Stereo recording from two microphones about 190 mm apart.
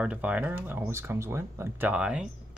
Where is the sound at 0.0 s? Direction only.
5° right (ahead or behind).